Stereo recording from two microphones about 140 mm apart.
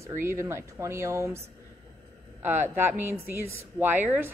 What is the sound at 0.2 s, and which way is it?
Speech, 20° right (ahead or behind).